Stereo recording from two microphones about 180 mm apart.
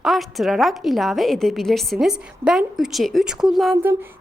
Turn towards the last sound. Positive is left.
turn(degrees=-15)  # may be behind; listen again after turning